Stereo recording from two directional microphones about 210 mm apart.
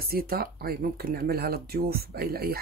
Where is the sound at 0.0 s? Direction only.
45° right (ahead or behind).